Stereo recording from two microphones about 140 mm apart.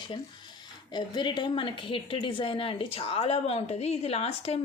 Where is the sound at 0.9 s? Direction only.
35° left (ahead or behind).